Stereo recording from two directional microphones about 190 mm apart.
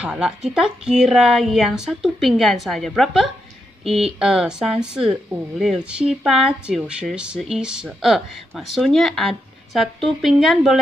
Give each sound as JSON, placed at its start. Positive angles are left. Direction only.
{"t": 0.0, "sound": "speech", "side_deg": -5}